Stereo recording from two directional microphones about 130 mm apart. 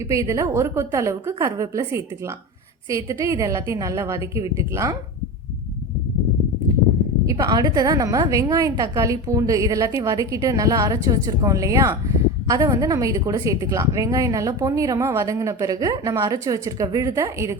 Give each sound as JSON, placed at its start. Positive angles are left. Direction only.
{"t": 0.1, "sound": "a woman's voice", "side_deg": -25}
{"t": 7.3, "sound": "a woman's voice", "side_deg": -25}